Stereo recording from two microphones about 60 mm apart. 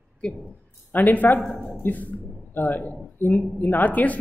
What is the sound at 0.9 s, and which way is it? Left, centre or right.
Speech, left.